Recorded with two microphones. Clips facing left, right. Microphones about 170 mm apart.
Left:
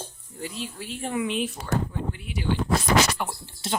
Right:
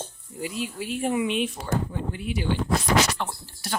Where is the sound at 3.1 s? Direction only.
10° left (ahead or behind).